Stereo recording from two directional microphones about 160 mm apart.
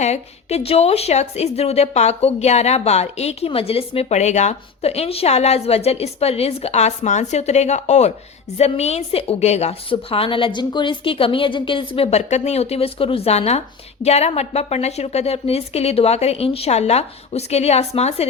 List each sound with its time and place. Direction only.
0.0 s a woman's voice: 45° left (ahead or behind)